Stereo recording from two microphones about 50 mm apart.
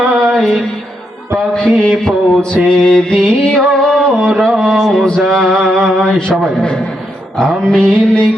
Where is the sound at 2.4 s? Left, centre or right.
Centre.